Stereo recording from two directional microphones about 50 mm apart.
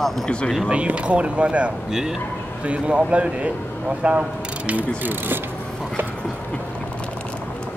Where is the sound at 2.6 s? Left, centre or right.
Right.